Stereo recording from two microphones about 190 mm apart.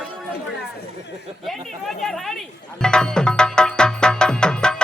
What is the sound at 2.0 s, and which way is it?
Speech, centre (ahead or behind).